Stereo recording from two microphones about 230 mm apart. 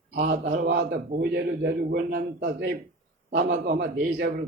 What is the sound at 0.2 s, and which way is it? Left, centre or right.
A man's voice, right.